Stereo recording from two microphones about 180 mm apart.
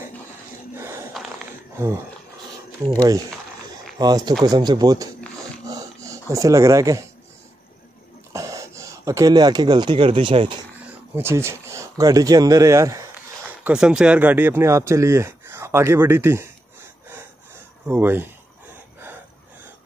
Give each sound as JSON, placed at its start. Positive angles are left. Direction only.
{"t": 0.7, "sound": "a sound", "side_deg": -15}
{"t": 4.0, "sound": "speech", "side_deg": -25}
{"t": 5.7, "sound": "dog", "side_deg": -20}
{"t": 8.3, "sound": "speech", "side_deg": -15}
{"t": 10.9, "sound": "speech", "side_deg": -10}
{"t": 13.7, "sound": "speech", "side_deg": -5}
{"t": 17.8, "sound": "speech", "side_deg": -10}